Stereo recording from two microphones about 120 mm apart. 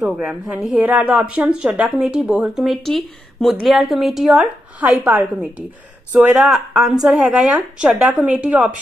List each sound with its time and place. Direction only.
0.0 s speech: 10° right (ahead or behind)